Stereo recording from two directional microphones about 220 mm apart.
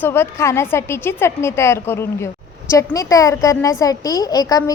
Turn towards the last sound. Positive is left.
turn(degrees=15)  # may be behind; listen again after turning